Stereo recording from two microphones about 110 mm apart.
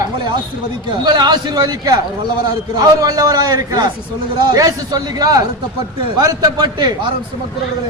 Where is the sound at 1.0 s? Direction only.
40° right (ahead or behind).